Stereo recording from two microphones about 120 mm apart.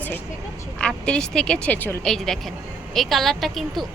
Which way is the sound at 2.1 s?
5° left (ahead or behind).